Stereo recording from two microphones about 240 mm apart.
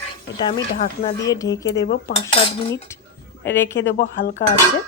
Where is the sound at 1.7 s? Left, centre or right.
Left.